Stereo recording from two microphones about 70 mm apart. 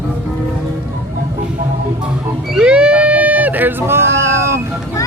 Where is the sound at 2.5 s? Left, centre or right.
Centre; by 4.6 s right.